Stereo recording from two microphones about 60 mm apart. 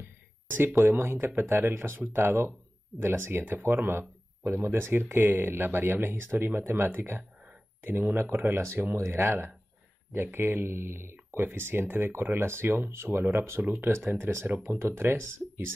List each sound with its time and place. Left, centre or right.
0.0 s speech: right